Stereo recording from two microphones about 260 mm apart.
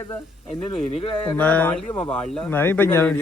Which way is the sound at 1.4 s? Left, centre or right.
Centre.